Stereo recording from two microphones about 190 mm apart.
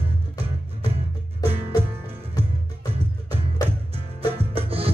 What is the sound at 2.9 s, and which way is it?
Music, 30° right (ahead or behind).